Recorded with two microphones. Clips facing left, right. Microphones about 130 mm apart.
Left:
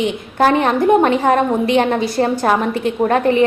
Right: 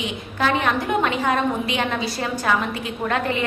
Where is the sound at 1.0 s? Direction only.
50° left (ahead or behind).